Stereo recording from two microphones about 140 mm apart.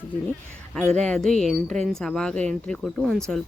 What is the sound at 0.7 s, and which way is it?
Speech, 5° left (ahead or behind).